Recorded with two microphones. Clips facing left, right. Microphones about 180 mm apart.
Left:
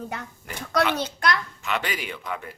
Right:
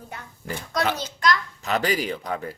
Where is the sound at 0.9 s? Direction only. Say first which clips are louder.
Right 1 dB; 60° left (ahead or behind).